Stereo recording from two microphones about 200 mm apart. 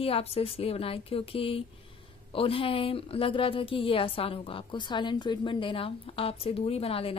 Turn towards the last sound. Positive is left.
turn(degrees=30)  # may be behind; listen again after turning